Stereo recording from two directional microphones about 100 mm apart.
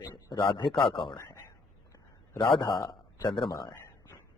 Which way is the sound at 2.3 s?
55° left (ahead or behind).